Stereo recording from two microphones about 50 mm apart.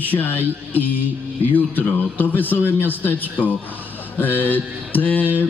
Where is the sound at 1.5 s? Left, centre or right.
Left.